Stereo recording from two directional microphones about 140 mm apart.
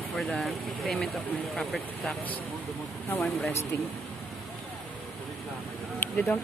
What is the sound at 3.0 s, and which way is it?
Speech, 15° left (ahead or behind).